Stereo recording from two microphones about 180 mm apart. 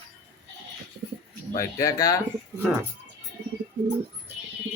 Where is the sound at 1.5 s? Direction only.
20° left (ahead or behind).